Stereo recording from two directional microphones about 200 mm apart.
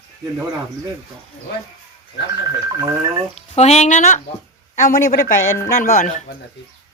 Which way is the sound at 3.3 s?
35° left (ahead or behind).